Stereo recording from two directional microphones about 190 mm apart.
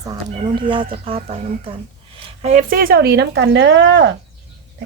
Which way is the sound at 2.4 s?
40° right (ahead or behind).